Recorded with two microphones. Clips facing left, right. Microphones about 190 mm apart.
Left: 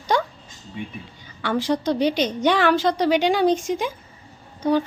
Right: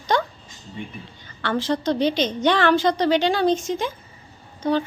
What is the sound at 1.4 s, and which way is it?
A woman's voice, 10° left (ahead or behind).